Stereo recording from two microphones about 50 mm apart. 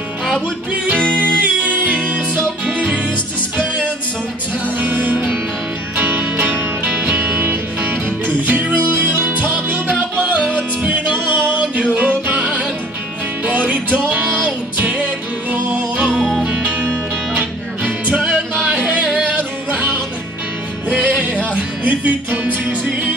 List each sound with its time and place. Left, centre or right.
1.1 s music: right
3.5 s music: right
13.5 s music: right
16.2 s music: centre
16.4 s music: right
19.1 s yodeling: right
20.9 s music: right